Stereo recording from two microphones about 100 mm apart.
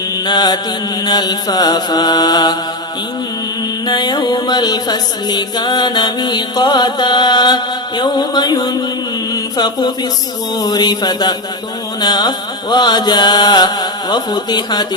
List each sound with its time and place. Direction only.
0.3 s music: 45° left (ahead or behind)
3.8 s music: 45° left (ahead or behind)